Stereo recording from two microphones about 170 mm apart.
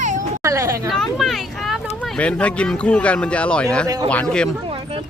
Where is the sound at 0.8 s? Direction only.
Centre (ahead or behind).